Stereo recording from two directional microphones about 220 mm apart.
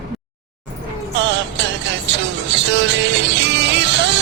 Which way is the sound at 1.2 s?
55° right (ahead or behind).